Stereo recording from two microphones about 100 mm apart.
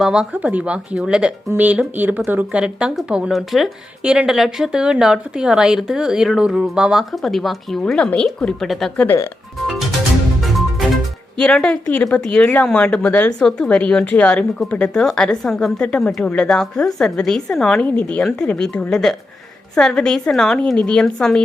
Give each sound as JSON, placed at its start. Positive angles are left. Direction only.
{"t": 0.0, "sound": "speech", "side_deg": -5}
{"t": 11.3, "sound": "a woman's voice", "side_deg": 10}